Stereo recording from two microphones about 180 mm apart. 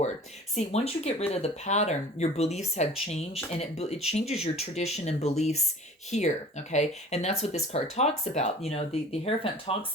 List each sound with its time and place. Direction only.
0.5 s speech: 35° left (ahead or behind)